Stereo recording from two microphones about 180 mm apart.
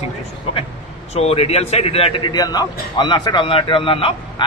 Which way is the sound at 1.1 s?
35° left (ahead or behind).